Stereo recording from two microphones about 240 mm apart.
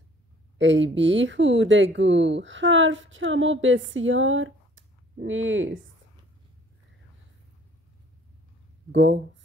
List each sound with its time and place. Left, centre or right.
0.6 s a woman's voice: right
8.9 s a woman's voice: right